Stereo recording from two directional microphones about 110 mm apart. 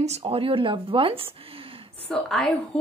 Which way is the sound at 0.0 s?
70° right (ahead or behind).